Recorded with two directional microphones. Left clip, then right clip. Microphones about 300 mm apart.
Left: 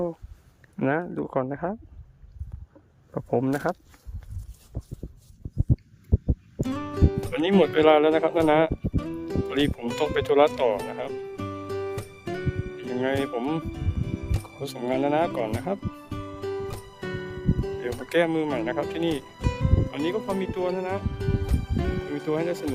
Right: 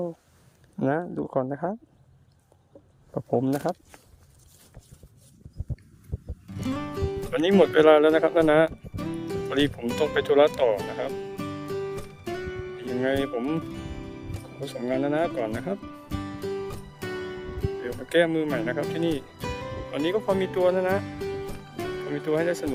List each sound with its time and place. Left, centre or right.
0.8 s speech: centre
3.2 s speech: centre
6.6 s music: centre